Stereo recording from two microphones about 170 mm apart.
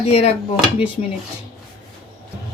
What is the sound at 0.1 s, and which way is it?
Speech, 35° left (ahead or behind).